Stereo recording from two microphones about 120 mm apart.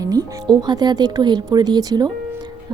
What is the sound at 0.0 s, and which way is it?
Speech, 30° right (ahead or behind).